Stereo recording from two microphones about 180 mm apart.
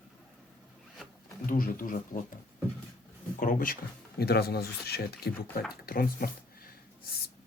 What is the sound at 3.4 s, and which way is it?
Speech, 50° left (ahead or behind).